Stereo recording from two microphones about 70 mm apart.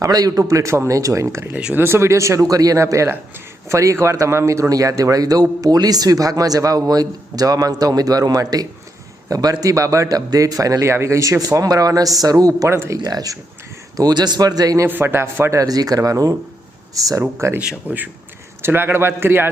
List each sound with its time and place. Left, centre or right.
0.0 s a man's voice: right
10.8 s a man's voice: right
12.6 s a man's voice: right
13.0 s speech: right
13.9 s a man's voice: right
14.8 s a man's voice: right
15.6 s a man's voice: right
17.3 s a man's voice: right
17.9 s a man's voice: right